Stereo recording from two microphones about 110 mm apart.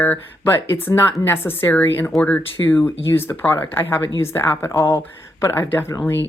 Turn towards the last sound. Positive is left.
turn(degrees=25)  # may be behind; listen again after turning